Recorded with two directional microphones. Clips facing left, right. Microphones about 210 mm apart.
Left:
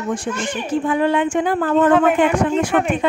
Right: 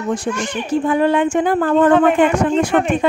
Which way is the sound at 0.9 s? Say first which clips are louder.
Right 2 dB; 45° right (ahead or behind).